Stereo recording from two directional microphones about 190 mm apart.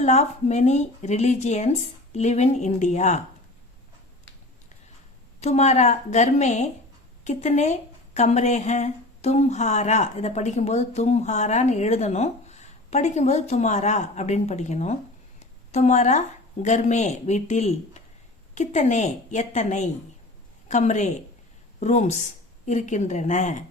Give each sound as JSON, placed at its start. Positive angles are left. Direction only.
{"t": 0.0, "sound": "a woman's voice", "side_deg": 35}
{"t": 5.4, "sound": "a woman's voice", "side_deg": 35}